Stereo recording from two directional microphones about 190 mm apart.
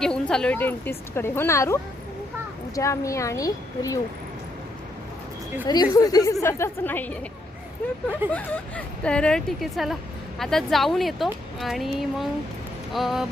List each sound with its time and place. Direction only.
0.0 s speech: 5° left (ahead or behind)
5.6 s a woman's voice: 20° left (ahead or behind)
8.3 s speech: 5° left (ahead or behind)